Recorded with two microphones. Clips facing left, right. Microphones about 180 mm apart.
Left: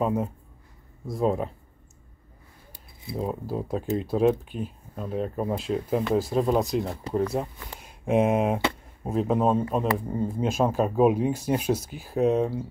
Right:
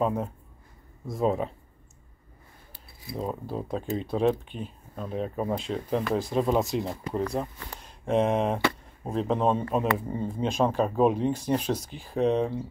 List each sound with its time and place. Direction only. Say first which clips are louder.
0.0 s speech: left 1 dB; 5° left (ahead or behind)
3.2 s speech: left 2 dB; 5° left (ahead or behind)